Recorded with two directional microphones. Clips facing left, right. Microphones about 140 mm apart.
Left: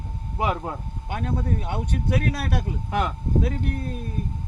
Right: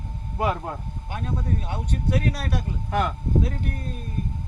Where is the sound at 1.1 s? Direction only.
65° left (ahead or behind).